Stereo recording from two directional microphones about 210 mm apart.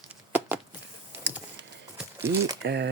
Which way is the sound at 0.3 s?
10° right (ahead or behind).